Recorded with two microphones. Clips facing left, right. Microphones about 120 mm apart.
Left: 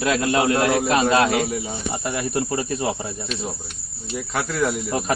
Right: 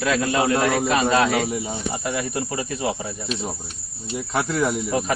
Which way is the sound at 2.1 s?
10° left (ahead or behind).